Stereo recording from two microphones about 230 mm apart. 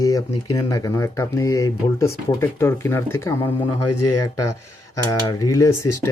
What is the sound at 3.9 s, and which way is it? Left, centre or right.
Speech, left.